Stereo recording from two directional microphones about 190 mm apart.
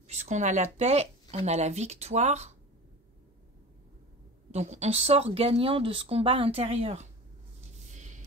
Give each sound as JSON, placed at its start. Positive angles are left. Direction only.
{"t": 0.1, "sound": "speech", "side_deg": -35}
{"t": 4.5, "sound": "speech", "side_deg": -35}